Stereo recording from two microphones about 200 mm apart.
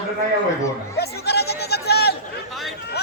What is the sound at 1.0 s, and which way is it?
Chatter, 55° left (ahead or behind).